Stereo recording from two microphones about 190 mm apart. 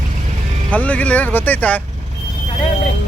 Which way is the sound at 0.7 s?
5° left (ahead or behind).